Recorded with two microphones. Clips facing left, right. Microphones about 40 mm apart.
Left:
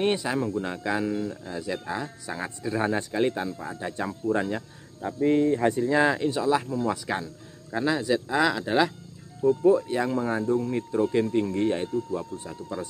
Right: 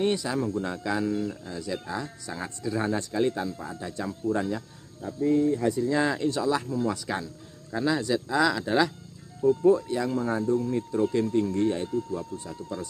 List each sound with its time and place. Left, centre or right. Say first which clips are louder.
0.0 s speech: left 1 dB; left
1.1 s speech: even; centre
1.5 s speech: left 2 dB; left
5.0 s speech: left 1 dB; left
5.9 s speech: left 3 dB; left
9.8 s speech: left 1 dB; left